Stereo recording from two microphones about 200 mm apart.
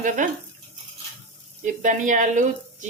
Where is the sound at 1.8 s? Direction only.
40° right (ahead or behind).